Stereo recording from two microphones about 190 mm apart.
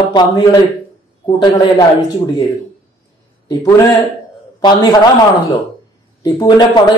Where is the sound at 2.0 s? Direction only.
20° left (ahead or behind).